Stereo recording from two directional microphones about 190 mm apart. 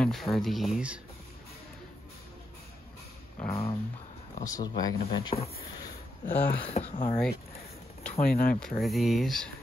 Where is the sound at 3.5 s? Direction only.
30° left (ahead or behind).